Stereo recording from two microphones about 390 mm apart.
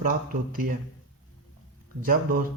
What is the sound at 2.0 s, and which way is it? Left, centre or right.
Speech, right.